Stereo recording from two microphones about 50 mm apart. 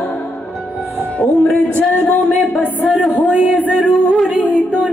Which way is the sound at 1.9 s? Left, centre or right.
Left.